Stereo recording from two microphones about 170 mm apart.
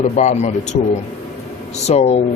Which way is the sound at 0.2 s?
45° left (ahead or behind).